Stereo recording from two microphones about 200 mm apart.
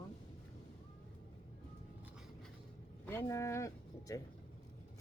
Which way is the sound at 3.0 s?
10° left (ahead or behind).